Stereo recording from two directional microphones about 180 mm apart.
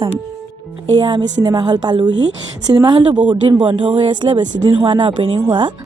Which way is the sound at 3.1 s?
5° right (ahead or behind).